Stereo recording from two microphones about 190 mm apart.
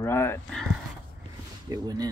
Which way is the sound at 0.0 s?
15° left (ahead or behind).